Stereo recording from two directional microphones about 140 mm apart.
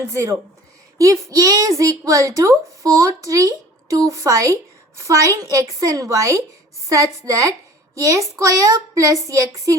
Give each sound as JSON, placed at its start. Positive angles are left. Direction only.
{"t": 0.0, "sound": "a child's voice", "side_deg": -20}